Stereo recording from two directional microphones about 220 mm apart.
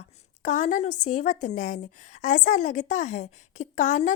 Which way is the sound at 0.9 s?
90° left.